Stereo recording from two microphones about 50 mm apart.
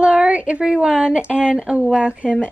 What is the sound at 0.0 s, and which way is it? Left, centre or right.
A woman's voice, centre.